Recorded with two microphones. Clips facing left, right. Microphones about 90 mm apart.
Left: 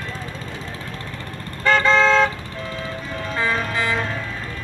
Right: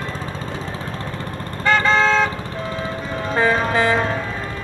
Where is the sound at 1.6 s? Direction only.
10° right (ahead or behind).